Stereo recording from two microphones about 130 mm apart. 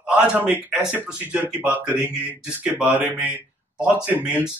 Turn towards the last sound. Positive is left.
turn(degrees=-10)  # may be behind; listen again after turning